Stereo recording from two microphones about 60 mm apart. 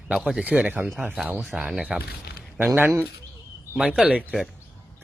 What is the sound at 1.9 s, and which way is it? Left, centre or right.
Speech, centre.